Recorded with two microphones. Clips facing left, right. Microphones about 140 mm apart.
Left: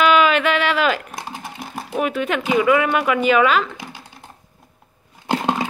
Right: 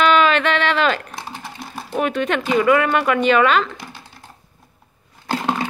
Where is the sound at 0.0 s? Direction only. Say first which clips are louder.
Even; 10° left (ahead or behind).